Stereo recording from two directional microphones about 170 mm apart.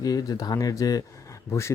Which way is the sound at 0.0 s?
20° left (ahead or behind).